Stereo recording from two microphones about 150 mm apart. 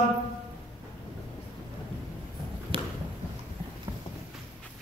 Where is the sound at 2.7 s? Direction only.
40° right (ahead or behind).